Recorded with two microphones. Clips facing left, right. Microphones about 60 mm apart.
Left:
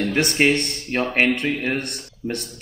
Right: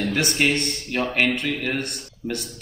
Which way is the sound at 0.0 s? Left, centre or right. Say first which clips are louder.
Left 3 dB; left.